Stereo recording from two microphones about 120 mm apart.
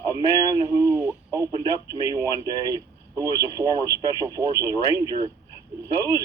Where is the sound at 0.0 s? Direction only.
30° right (ahead or behind).